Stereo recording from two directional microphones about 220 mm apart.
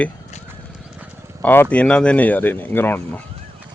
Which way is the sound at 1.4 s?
10° left (ahead or behind).